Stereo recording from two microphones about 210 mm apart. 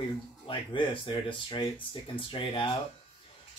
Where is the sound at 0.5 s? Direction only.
25° left (ahead or behind).